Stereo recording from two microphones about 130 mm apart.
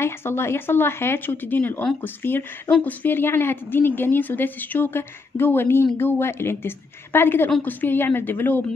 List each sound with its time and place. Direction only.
0.0 s speech: 20° left (ahead or behind)